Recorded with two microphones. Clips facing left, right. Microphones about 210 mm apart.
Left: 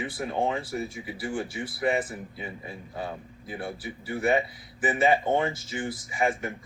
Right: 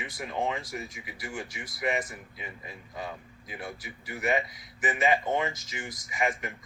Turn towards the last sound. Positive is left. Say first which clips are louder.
# left 4 dB
turn(degrees=30)  # may be behind; listen again after turning